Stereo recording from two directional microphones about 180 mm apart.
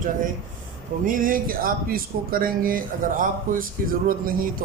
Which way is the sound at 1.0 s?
50° right (ahead or behind).